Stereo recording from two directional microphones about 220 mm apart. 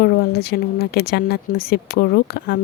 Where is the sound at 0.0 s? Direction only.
45° left (ahead or behind).